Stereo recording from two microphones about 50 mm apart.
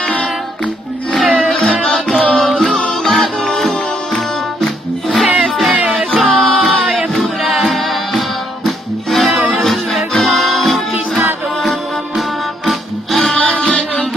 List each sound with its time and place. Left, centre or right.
1.1 s music: centre
7.2 s singing: centre
8.6 s music: centre
13.5 s music: left